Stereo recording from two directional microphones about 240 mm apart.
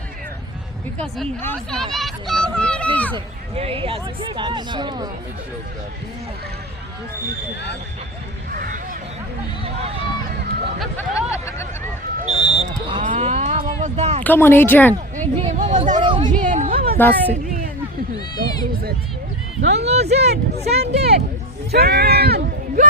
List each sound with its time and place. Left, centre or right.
0.9 s speech: centre
3.5 s speech: right
8.5 s a sound: right
9.6 s speech: right
10.8 s speech: centre
12.2 s speech: right
14.3 s speech: centre
15.1 s a sound: right
16.4 s a sound: right
17.0 s speech: centre
19.8 s speech: right
20.1 s speech: right